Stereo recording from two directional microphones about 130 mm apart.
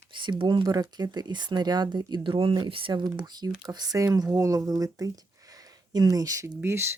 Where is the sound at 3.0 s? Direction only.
30° right (ahead or behind).